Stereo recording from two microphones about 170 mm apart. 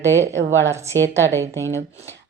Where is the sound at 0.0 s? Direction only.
15° right (ahead or behind).